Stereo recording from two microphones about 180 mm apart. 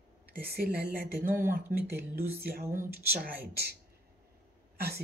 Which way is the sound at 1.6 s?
10° right (ahead or behind).